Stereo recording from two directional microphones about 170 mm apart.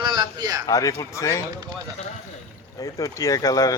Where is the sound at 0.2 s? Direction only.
20° right (ahead or behind).